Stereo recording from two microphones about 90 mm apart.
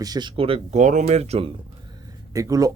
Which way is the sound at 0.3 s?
90° right.